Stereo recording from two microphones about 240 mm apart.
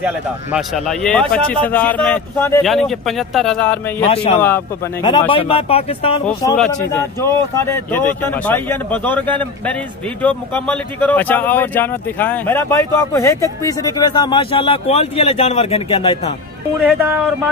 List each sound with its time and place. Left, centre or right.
0.0 s a man's voice: centre
4.1 s speech: left
4.4 s speech: centre
6.2 s a man's voice: centre; by 16.3 s left
16.8 s speech: centre